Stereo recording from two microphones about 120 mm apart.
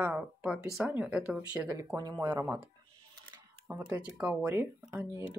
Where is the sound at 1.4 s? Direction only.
30° right (ahead or behind).